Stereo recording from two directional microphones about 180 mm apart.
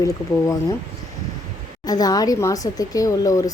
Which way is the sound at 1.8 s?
20° left (ahead or behind).